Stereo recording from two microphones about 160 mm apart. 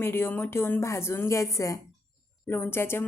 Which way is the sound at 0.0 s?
15° left (ahead or behind).